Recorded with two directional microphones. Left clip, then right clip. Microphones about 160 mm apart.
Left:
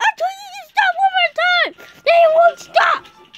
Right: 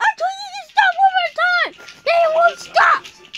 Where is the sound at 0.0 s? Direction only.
45° left (ahead or behind).